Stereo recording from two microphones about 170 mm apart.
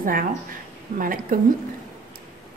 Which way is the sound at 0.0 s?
55° right (ahead or behind).